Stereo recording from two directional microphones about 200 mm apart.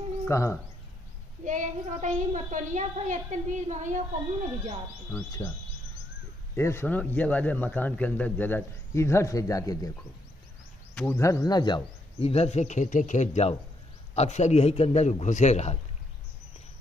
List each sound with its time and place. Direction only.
0.3 s a man's voice: 15° left (ahead or behind)
1.4 s a woman's voice: 40° right (ahead or behind)
5.1 s a man's voice: 15° left (ahead or behind)
6.5 s a man's voice: 10° left (ahead or behind)
11.0 s a man's voice: 10° left (ahead or behind); by 15.8 s 35° left (ahead or behind)